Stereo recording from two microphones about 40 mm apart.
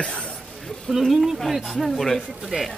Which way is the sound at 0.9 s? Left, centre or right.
Centre.